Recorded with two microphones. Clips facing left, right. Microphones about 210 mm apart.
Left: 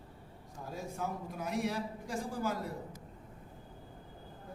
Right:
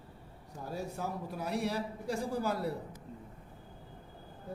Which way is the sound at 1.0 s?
35° right (ahead or behind).